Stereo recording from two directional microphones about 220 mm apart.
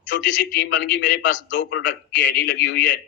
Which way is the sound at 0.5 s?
50° left (ahead or behind).